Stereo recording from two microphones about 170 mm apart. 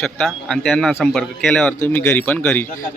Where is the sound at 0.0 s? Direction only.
Centre (ahead or behind).